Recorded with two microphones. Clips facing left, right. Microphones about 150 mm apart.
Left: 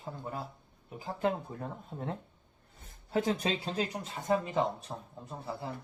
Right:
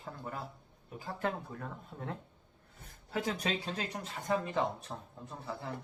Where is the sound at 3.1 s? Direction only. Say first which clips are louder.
Left 4 dB; 30° left (ahead or behind).